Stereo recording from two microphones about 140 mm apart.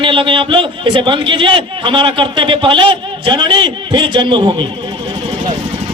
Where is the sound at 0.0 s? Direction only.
35° right (ahead or behind).